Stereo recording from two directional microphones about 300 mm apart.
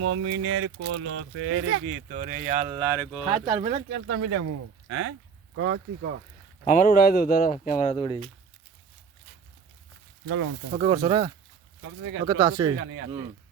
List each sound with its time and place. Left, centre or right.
0.0 s speech: right; by 3.6 s centre
3.6 s speech: right
3.8 s speech: right
6.7 s speech: left
10.7 s speech: centre
11.8 s speech: right
12.2 s speech: centre
12.7 s speech: right